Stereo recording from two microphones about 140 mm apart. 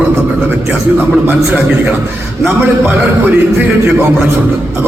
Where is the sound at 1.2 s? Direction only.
10° right (ahead or behind).